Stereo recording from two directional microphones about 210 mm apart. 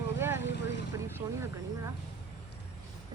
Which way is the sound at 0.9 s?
15° right (ahead or behind).